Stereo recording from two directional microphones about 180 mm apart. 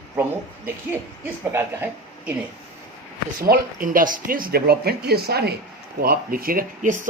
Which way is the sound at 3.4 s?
50° right (ahead or behind).